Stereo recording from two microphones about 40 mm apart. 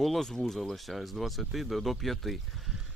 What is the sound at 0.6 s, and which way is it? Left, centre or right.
Speech, centre.